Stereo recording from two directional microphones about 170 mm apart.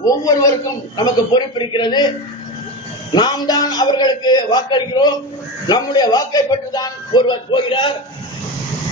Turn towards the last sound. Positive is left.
turn(degrees=30)  # may be behind; listen again after turning